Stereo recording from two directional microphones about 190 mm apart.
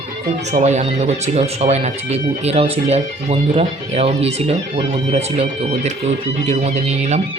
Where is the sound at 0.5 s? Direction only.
35° right (ahead or behind).